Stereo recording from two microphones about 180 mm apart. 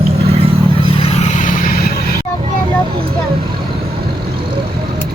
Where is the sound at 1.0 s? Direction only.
35° left (ahead or behind).